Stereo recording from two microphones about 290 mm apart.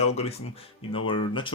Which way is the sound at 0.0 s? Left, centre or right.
Left.